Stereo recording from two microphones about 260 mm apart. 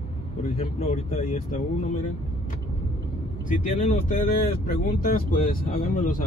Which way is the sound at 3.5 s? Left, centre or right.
Left.